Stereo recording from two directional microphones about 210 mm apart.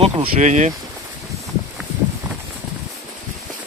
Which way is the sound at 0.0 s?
30° right (ahead or behind).